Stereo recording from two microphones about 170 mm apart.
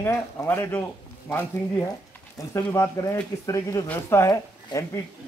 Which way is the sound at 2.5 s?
15° left (ahead or behind).